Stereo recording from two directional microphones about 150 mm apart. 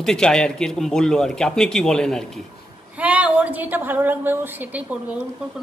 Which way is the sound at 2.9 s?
10° right (ahead or behind).